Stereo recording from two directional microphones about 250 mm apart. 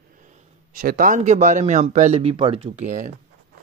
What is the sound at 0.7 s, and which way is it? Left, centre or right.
Speech, right.